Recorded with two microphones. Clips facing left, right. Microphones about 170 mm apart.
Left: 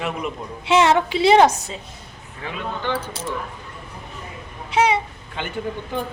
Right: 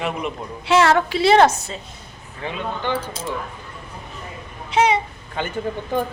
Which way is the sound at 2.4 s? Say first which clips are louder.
Right 3 dB; 30° right (ahead or behind).